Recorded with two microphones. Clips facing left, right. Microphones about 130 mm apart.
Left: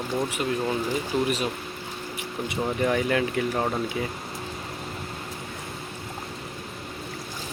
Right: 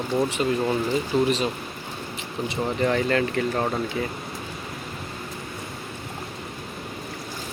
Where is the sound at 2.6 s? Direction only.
10° left (ahead or behind).